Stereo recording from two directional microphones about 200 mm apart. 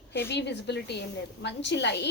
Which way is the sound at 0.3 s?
60° left (ahead or behind).